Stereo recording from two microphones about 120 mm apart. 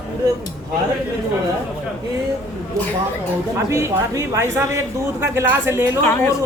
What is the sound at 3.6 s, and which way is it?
Speech, 25° right (ahead or behind).